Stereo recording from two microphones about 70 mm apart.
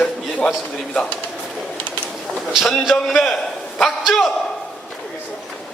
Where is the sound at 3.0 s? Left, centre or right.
Centre.